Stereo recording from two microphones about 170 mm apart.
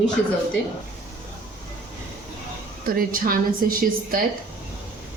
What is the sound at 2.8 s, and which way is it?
Speech, 55° right (ahead or behind).